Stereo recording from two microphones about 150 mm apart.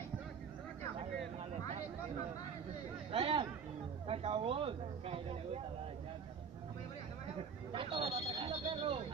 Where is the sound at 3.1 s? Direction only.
35° right (ahead or behind).